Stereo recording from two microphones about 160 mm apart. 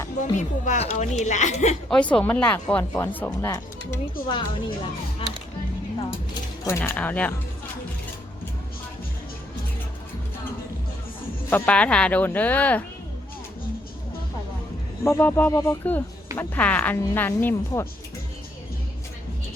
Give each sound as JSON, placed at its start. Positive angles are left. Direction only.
{"t": 0.2, "sound": "speech", "side_deg": 50}
{"t": 1.9, "sound": "speech", "side_deg": 5}
{"t": 4.3, "sound": "speech", "side_deg": 30}
{"t": 6.7, "sound": "speech", "side_deg": 15}
{"t": 11.4, "sound": "speech", "side_deg": 10}
{"t": 15.0, "sound": "speech", "side_deg": 15}